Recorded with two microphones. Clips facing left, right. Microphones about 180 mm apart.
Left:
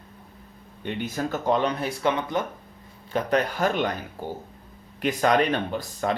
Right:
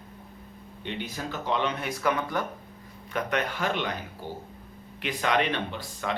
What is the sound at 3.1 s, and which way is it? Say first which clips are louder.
Speech: left 5 dB; 40° left (ahead or behind).